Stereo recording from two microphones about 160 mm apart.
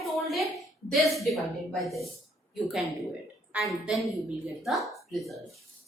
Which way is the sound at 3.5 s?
5° right (ahead or behind).